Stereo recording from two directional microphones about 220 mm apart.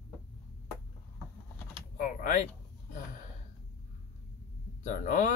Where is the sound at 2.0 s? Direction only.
35° left (ahead or behind).